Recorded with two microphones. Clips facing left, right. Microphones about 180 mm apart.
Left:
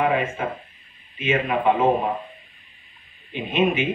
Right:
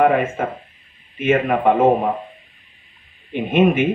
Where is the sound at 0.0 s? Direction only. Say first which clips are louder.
Right 6 dB; 50° right (ahead or behind).